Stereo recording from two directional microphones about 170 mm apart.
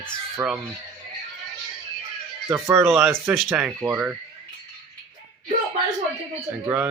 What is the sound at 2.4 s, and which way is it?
Speech, 15° right (ahead or behind).